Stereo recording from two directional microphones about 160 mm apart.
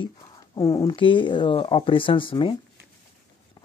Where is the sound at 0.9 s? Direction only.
30° left (ahead or behind).